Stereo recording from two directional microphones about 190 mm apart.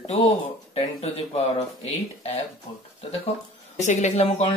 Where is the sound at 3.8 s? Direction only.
35° left (ahead or behind).